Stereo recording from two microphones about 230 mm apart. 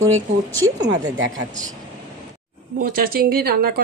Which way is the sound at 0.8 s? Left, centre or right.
Right.